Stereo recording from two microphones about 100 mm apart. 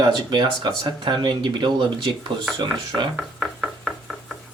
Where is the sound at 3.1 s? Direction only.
5° left (ahead or behind).